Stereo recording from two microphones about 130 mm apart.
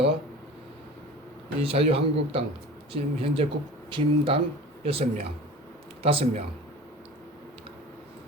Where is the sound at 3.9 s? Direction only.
45° right (ahead or behind).